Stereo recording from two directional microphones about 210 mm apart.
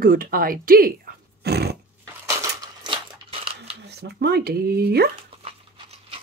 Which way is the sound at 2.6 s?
20° right (ahead or behind).